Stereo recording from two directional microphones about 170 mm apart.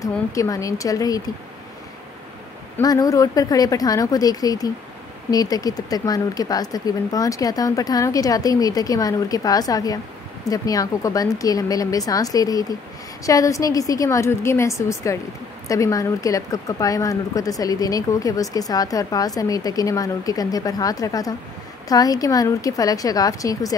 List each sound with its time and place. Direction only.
0.0 s speech: 20° left (ahead or behind)
2.8 s a woman's voice: 20° left (ahead or behind)